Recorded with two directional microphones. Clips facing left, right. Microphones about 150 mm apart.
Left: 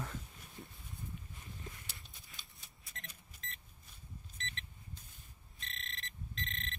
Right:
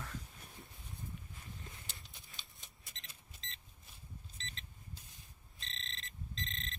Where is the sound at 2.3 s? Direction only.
20° right (ahead or behind).